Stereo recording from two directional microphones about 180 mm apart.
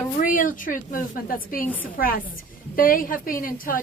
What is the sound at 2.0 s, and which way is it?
A woman's voice, 55° left (ahead or behind).